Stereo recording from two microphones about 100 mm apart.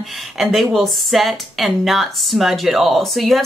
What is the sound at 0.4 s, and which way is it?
Speech, centre (ahead or behind).